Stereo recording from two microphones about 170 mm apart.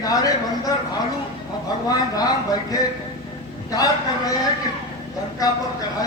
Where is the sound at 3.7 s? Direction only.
20° left (ahead or behind).